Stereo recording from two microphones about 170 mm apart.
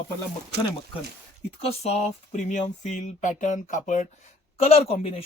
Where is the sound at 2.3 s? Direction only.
45° left (ahead or behind).